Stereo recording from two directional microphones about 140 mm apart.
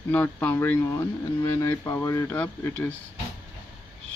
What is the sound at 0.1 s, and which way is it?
Speech, 10° left (ahead or behind).